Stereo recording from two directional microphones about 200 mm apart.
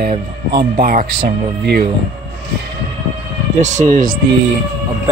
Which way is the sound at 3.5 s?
35° right (ahead or behind).